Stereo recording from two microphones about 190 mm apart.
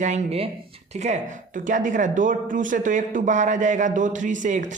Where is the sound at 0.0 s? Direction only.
35° right (ahead or behind).